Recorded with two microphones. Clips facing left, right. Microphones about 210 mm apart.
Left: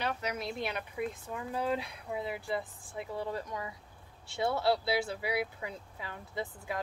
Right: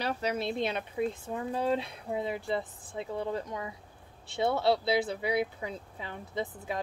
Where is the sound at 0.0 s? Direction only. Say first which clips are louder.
Right 4 dB; 30° right (ahead or behind).